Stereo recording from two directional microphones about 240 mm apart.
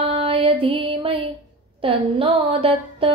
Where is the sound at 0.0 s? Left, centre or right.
Right.